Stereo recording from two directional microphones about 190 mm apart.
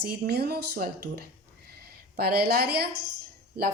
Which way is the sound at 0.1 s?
55° right (ahead or behind).